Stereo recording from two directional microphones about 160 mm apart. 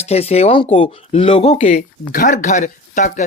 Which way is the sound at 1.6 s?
50° left (ahead or behind).